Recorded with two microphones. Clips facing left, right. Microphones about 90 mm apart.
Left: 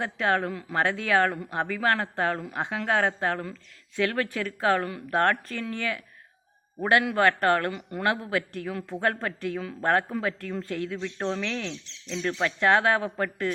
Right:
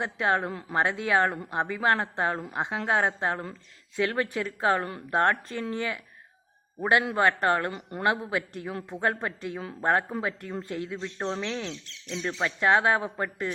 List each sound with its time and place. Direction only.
0.0 s a man's voice: 20° right (ahead or behind)